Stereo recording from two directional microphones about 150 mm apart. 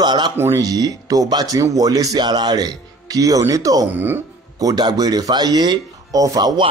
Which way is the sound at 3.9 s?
15° right (ahead or behind).